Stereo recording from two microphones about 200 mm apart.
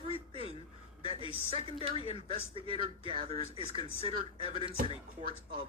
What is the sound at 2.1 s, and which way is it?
A man's voice, 30° right (ahead or behind).